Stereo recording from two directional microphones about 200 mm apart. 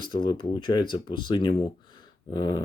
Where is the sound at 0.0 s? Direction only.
20° left (ahead or behind).